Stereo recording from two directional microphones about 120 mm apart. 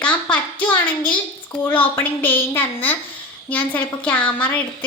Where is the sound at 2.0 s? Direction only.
15° left (ahead or behind).